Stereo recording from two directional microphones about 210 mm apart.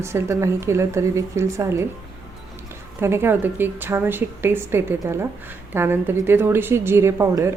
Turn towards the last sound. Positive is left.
turn(degrees=-15)  # may be behind; listen again after turning